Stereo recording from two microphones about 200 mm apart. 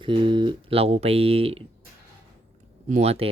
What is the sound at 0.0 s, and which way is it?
Speech, 25° right (ahead or behind).